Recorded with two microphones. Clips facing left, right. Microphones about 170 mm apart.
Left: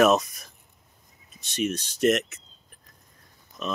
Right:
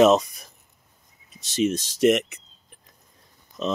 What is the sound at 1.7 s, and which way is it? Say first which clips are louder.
Speech: right 1 dB; 90° right.